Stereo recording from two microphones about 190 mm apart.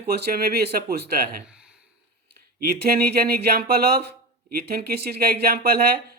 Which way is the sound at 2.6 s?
55° right (ahead or behind).